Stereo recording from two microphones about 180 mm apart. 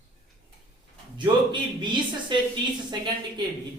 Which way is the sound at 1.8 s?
25° right (ahead or behind).